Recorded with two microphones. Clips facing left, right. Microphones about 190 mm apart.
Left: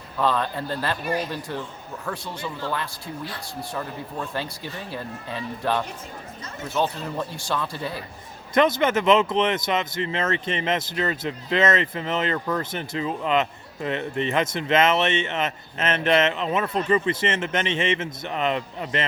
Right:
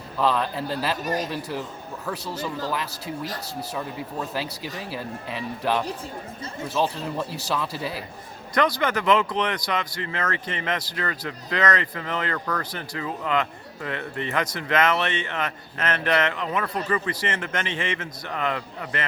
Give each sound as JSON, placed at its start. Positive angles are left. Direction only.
{"t": 0.2, "sound": "speech", "side_deg": 0}
{"t": 1.0, "sound": "speech", "side_deg": -40}
{"t": 1.3, "sound": "speech", "side_deg": -5}
{"t": 3.4, "sound": "speech", "side_deg": -5}
{"t": 7.0, "sound": "speech", "side_deg": 0}
{"t": 8.5, "sound": "speech", "side_deg": 25}